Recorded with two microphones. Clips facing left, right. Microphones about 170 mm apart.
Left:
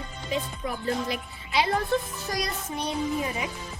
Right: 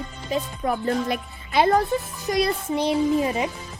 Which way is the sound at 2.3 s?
20° right (ahead or behind).